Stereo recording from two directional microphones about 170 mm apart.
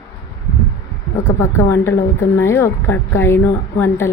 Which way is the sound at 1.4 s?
15° left (ahead or behind).